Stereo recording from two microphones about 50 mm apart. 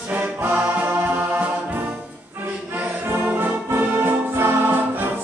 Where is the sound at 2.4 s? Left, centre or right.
Right.